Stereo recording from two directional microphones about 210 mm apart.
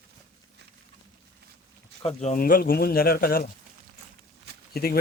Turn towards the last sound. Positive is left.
turn(degrees=45)  # may be behind; listen again after turning